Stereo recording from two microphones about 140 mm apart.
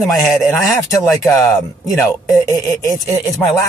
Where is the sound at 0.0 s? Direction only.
Centre (ahead or behind).